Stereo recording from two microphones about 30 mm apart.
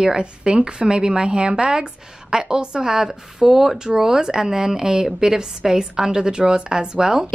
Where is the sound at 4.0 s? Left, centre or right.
Right.